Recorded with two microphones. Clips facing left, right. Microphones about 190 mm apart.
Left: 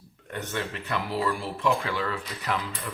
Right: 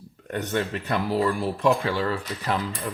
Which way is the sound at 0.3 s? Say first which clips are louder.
Right 6 dB; 40° right (ahead or behind).